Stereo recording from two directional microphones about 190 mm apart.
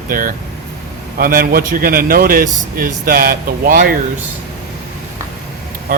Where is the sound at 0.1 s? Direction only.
50° right (ahead or behind).